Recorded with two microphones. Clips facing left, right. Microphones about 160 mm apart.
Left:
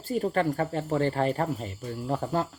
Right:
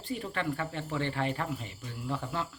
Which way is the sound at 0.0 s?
40° left (ahead or behind).